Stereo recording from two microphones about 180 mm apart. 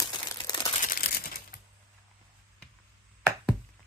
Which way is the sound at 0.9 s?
55° left (ahead or behind).